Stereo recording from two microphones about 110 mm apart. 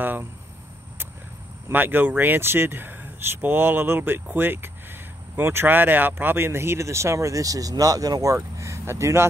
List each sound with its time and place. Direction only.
0.0 s speech: 20° right (ahead or behind)
1.7 s speech: 15° right (ahead or behind)